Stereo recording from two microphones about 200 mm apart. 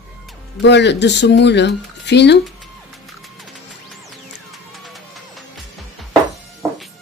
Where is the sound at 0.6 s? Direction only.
60° left (ahead or behind).